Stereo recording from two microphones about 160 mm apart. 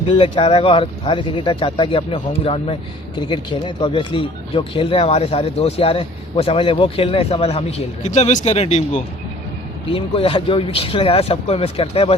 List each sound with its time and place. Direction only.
0.2 s speech: 35° left (ahead or behind)